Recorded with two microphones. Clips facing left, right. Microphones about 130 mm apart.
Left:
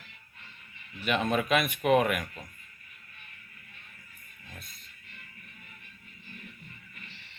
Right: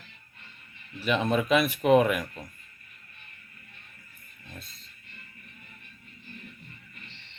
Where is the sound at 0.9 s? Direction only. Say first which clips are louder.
Right 2 dB; 30° right (ahead or behind).